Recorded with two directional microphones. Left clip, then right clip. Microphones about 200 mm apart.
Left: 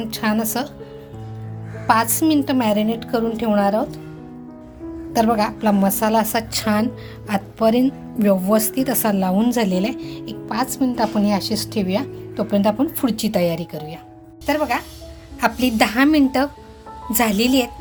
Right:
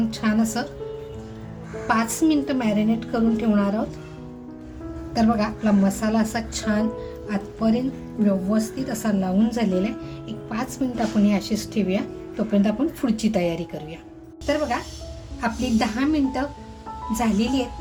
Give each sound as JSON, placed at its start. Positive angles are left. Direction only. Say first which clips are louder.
{"t": 0.1, "sound": "speech", "louder": "left 3 dB", "side_deg": 40}
{"t": 1.9, "sound": "speech", "louder": "left 5 dB", "side_deg": 40}
{"t": 5.1, "sound": "a woman's voice", "louder": "left 5 dB", "side_deg": 50}
{"t": 14.4, "sound": "a woman's voice", "louder": "left 3 dB", "side_deg": 50}